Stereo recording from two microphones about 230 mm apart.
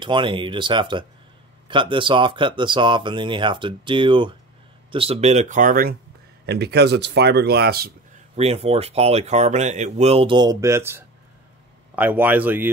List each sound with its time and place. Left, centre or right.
0.0 s speech: right
8.4 s speech: right; by 12.6 s centre